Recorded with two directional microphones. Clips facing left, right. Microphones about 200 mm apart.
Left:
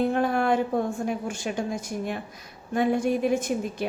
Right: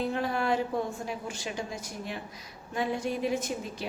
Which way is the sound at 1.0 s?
50° left (ahead or behind).